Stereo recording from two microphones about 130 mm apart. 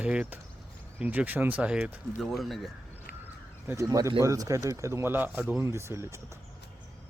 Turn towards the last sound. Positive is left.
turn(degrees=-20)  # may be behind; listen again after turning